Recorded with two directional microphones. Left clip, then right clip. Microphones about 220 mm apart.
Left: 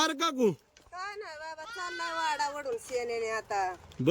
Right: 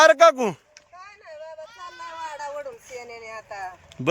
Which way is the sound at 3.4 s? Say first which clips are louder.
Left 1 dB; 30° left (ahead or behind).